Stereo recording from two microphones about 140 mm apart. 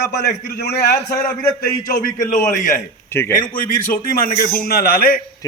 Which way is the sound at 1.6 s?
90° left.